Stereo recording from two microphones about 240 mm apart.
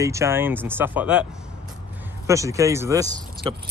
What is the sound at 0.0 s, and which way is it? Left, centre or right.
Speech, centre.